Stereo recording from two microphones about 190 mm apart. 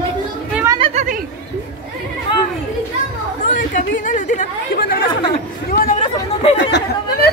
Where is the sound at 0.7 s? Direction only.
30° right (ahead or behind).